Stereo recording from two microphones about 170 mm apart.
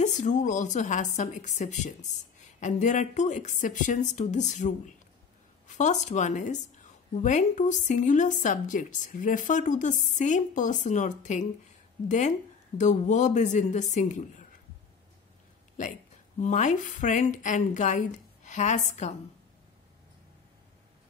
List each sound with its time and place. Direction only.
0.0 s a woman's voice: 45° left (ahead or behind)
15.8 s a woman's voice: 45° left (ahead or behind)